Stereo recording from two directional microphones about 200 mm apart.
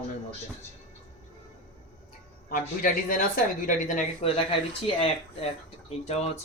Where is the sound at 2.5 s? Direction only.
45° left (ahead or behind).